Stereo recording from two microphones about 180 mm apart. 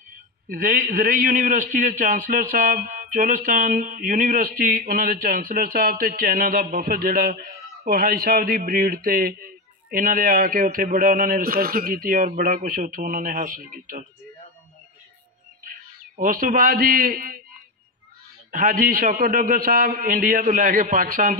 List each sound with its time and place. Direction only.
0.5 s a man's voice: 55° right (ahead or behind)
16.2 s a man's voice: 50° right (ahead or behind)
18.5 s a man's voice: 50° right (ahead or behind)